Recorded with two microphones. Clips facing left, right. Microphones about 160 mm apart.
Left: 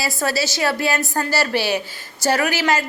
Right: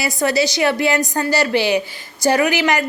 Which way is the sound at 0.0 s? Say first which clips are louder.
Right 4 dB; 20° right (ahead or behind).